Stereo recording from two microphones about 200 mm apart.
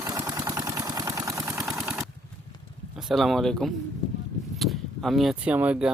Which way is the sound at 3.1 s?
Centre (ahead or behind).